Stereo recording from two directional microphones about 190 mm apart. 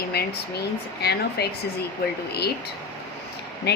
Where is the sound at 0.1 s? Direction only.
55° left (ahead or behind).